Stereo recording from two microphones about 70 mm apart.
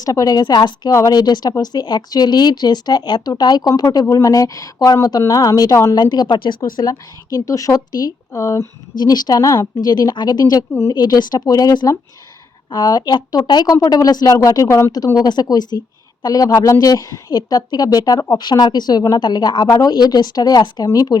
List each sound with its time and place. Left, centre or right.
0.0 s speech: left
0.9 s speech: left
4.0 s a woman's voice: left
5.9 s a woman's voice: left
6.6 s a woman's voice: left
8.3 s speech: left
9.0 s speech: left
9.4 s speech: left
9.8 s speech: left
12.7 s speech: left
15.2 s speech: left
16.2 s speech: left
16.6 s a woman's voice: left
20.8 s a woman's voice: left